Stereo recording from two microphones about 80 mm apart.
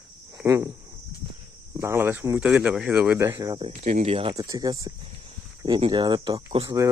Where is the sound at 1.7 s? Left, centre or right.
Right.